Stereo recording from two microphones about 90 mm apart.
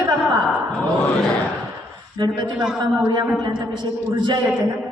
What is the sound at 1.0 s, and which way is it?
Speech, 10° left (ahead or behind).